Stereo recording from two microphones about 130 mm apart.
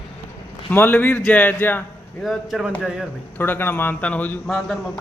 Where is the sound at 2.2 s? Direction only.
Centre (ahead or behind).